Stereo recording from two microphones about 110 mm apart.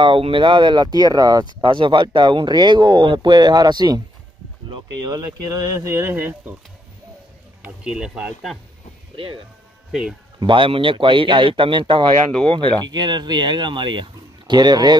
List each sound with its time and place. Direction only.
0.0 s speech: 50° right (ahead or behind)
1.6 s speech: 45° right (ahead or behind)
5.1 s speech: 35° right (ahead or behind); by 6.5 s 15° right (ahead or behind)
7.6 s speech: 10° right (ahead or behind)
9.1 s speech: 55° right (ahead or behind)
10.4 s speech: 50° right (ahead or behind)